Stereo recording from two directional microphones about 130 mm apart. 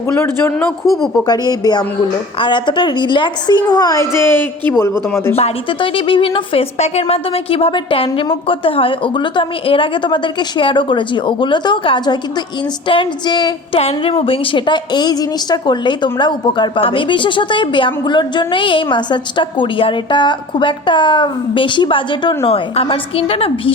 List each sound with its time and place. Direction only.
0.1 s speech: 20° left (ahead or behind)
1.3 s a woman's voice: 30° left (ahead or behind)
5.4 s a woman's voice: 40° left (ahead or behind)
13.7 s a woman's voice: 50° left (ahead or behind)